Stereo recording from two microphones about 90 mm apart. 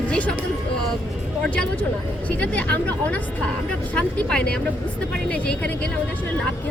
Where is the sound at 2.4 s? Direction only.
15° left (ahead or behind).